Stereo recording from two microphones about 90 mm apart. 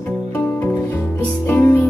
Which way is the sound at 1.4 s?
20° left (ahead or behind).